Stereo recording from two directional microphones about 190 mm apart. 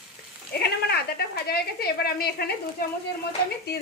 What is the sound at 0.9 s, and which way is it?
Speech, 55° left (ahead or behind).